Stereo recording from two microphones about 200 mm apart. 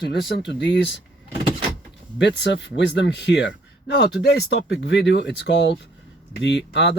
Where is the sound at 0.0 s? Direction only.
60° left (ahead or behind).